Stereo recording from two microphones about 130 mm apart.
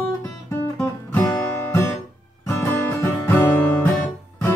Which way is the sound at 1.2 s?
20° left (ahead or behind).